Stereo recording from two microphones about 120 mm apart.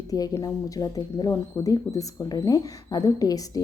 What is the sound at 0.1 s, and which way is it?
A woman's voice, 30° left (ahead or behind).